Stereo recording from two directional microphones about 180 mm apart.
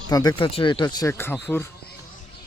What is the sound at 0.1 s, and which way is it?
Speech, 20° left (ahead or behind).